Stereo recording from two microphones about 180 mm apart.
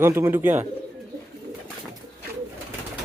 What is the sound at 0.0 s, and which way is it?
Speech, 15° right (ahead or behind).